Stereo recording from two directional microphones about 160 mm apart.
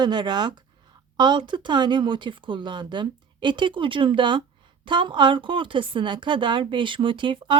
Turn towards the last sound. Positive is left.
turn(degrees=-30)  # may be behind; listen again after turning